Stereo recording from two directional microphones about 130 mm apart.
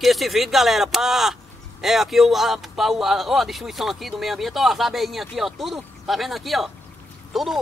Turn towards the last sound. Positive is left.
turn(degrees=0)  # may be behind; listen again after turning